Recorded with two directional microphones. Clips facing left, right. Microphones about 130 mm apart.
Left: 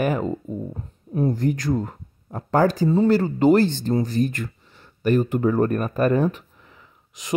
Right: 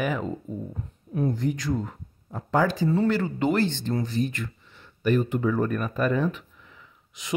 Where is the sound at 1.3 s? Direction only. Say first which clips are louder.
Left 4 dB; 50° left (ahead or behind).